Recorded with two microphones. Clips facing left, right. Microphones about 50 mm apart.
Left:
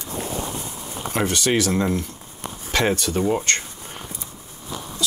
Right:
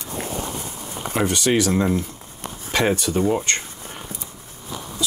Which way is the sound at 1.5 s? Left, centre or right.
Centre.